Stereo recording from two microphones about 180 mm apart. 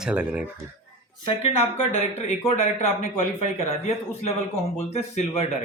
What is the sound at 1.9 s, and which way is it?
Speech, 40° left (ahead or behind).